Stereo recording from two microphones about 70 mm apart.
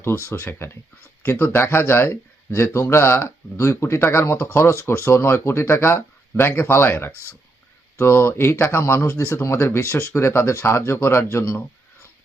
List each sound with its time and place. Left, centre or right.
0.6 s speech: left